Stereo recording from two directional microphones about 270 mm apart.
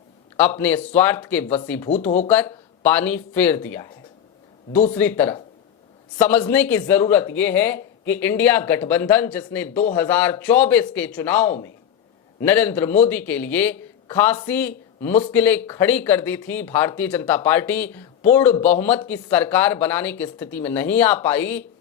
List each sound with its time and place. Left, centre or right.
0.3 s speech: centre
2.0 s speech: left
2.8 s speech: centre